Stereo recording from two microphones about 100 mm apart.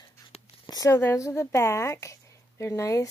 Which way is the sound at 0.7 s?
35° left (ahead or behind).